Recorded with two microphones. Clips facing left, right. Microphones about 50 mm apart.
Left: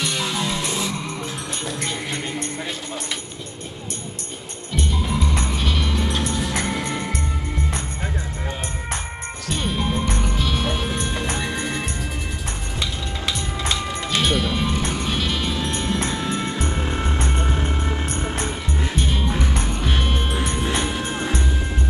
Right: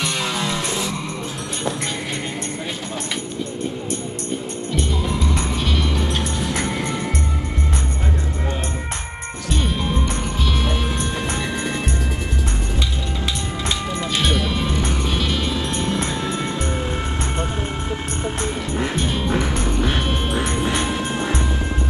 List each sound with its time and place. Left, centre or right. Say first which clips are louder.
0.0 s music: right 1 dB; centre
14.2 s music: left 1 dB; centre
18.9 s music: even; centre
20.3 s music: right 3 dB; centre